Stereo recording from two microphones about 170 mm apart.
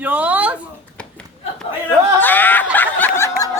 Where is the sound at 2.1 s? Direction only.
10° left (ahead or behind).